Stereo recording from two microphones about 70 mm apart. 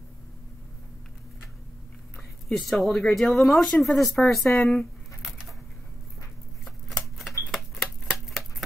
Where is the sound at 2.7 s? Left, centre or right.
Centre.